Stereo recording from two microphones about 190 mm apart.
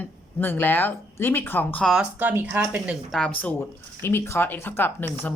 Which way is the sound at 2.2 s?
10° right (ahead or behind).